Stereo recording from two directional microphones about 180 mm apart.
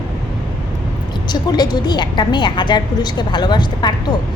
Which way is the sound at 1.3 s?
25° left (ahead or behind).